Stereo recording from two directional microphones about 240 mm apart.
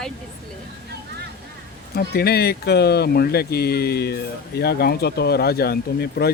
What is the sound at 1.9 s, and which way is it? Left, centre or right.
Speech, left.